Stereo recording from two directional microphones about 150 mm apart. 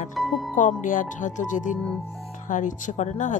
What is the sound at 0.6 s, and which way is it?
Speech, 60° left (ahead or behind).